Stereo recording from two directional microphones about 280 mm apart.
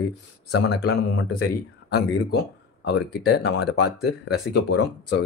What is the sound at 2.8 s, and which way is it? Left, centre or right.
Speech, left.